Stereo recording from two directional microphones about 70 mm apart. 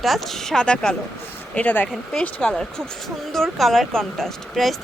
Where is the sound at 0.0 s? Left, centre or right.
Centre.